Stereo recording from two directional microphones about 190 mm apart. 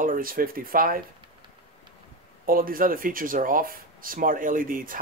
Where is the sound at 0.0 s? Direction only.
45° right (ahead or behind).